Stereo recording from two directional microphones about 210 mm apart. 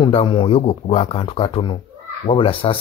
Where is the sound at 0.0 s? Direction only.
25° left (ahead or behind).